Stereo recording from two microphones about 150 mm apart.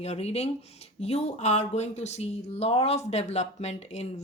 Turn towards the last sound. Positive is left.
turn(degrees=45)  # may be behind; listen again after turning